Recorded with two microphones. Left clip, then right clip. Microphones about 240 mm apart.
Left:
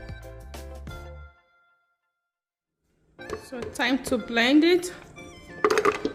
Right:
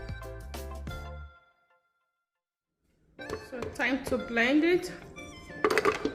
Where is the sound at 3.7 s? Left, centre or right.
Left.